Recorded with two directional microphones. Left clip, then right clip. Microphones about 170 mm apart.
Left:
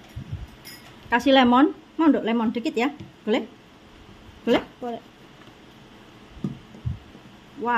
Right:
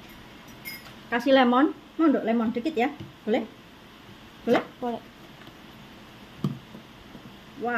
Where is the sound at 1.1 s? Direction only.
60° left (ahead or behind).